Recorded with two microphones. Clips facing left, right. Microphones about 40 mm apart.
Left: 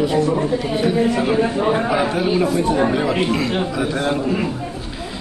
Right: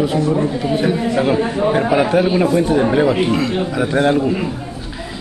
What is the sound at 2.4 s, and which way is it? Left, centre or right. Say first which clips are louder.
Speech: right 3 dB; right.